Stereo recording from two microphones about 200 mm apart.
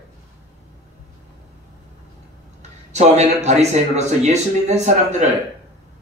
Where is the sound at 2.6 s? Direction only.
35° right (ahead or behind).